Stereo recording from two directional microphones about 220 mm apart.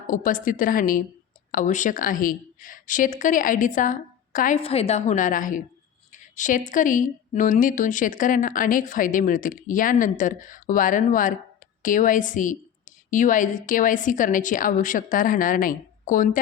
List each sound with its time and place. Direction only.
0.1 s speech: 40° left (ahead or behind)